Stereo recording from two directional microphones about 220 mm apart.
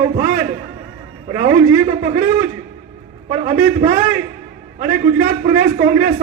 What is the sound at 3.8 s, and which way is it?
Speech, 35° right (ahead or behind).